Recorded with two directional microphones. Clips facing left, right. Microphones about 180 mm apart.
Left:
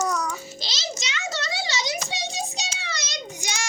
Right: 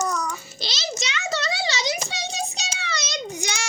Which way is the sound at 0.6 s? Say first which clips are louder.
Right 3 dB; 65° right (ahead or behind).